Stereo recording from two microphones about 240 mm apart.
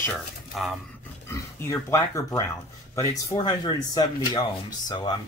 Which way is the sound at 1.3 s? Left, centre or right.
Centre.